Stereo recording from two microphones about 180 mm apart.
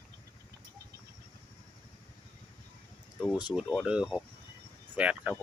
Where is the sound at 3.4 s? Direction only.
5° right (ahead or behind).